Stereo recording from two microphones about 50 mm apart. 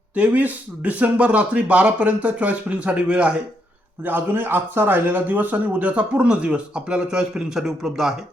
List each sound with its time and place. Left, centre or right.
0.2 s speech: right
4.0 s a man's voice: right; by 8.1 s centre